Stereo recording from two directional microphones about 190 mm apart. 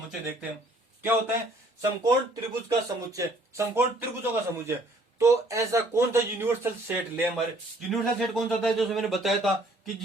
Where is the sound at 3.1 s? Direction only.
15° right (ahead or behind).